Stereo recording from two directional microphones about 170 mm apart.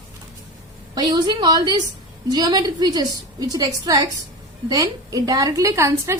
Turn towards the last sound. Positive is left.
turn(degrees=-15)  # may be behind; listen again after turning